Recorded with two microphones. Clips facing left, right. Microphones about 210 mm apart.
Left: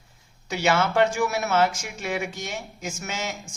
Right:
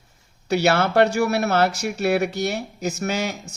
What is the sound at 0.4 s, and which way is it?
Speech, 65° right (ahead or behind).